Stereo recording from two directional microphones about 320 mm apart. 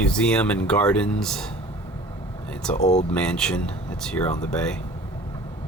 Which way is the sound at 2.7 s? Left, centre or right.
Left.